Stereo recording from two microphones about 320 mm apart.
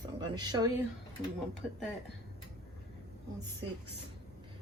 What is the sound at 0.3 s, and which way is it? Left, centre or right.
Speech, centre.